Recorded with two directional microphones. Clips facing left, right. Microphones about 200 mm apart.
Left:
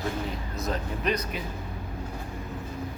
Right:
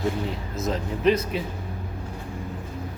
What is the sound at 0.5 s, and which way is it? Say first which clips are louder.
Speech: right 4 dB; 25° right (ahead or behind).